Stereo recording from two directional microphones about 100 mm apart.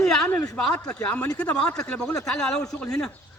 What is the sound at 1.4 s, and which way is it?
A man's voice, 10° left (ahead or behind).